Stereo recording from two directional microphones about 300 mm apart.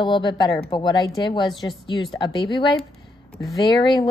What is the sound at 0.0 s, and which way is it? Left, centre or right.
Speech, centre.